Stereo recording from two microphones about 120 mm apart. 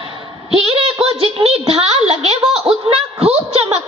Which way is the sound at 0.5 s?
55° right (ahead or behind).